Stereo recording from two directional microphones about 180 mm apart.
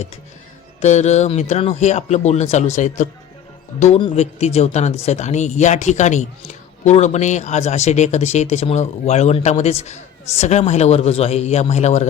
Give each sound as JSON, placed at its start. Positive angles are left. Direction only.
{"t": 0.8, "sound": "speech", "side_deg": 40}